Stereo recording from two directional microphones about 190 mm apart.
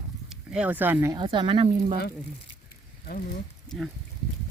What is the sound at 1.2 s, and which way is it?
Speech, 25° right (ahead or behind).